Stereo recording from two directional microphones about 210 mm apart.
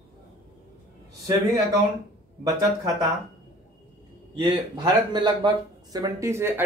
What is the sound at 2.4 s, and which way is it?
Speech, 15° right (ahead or behind).